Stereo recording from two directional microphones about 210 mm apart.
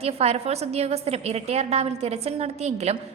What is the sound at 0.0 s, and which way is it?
A woman's voice, 30° right (ahead or behind).